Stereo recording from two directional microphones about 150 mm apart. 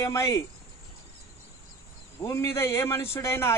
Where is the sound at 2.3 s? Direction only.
20° left (ahead or behind).